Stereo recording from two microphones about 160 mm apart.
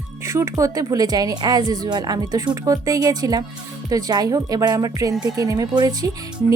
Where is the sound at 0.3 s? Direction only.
20° right (ahead or behind).